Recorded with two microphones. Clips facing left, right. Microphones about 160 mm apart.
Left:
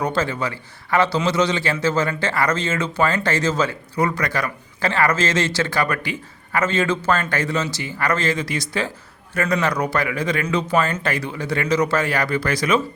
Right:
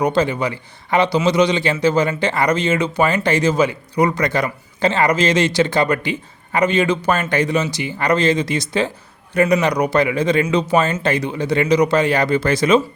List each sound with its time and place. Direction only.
0.0 s a man's voice: 15° right (ahead or behind)